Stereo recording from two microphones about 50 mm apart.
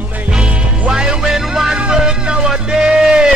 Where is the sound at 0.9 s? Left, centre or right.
Centre.